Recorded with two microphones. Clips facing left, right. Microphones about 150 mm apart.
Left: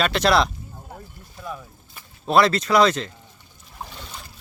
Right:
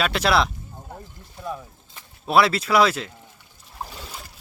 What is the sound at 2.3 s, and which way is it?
Speech, 5° right (ahead or behind).